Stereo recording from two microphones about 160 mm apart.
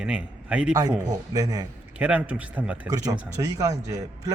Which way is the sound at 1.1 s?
20° right (ahead or behind).